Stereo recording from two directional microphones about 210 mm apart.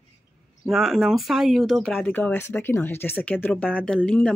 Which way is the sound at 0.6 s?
Centre (ahead or behind).